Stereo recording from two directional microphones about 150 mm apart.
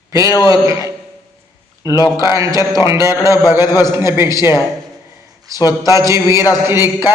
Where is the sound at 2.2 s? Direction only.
20° right (ahead or behind).